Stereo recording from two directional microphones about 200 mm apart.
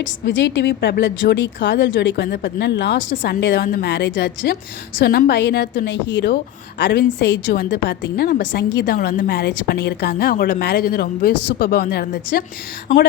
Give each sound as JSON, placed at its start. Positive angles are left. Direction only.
{"t": 0.3, "sound": "speech", "side_deg": 65}
{"t": 3.6, "sound": "a woman's voice", "side_deg": 45}